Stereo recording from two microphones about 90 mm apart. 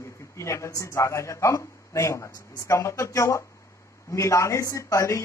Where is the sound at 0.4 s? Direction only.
35° left (ahead or behind).